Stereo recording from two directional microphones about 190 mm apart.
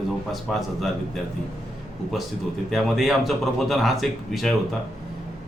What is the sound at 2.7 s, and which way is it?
A man's voice, centre (ahead or behind).